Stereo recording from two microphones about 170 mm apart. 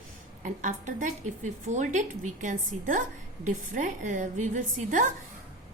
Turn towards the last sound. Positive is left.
turn(degrees=-45)  # may be behind; listen again after turning